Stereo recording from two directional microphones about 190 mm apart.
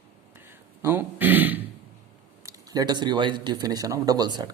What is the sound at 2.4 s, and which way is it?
Speech, 20° right (ahead or behind).